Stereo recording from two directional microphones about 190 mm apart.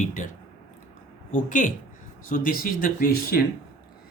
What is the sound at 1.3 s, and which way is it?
Speech, 45° left (ahead or behind).